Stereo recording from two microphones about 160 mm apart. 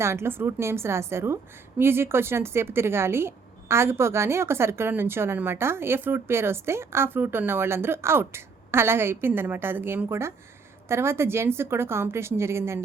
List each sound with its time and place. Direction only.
0.0 s speech: 15° right (ahead or behind)